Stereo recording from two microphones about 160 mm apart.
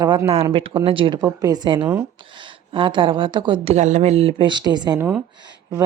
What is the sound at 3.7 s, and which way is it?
A woman's voice, 45° right (ahead or behind).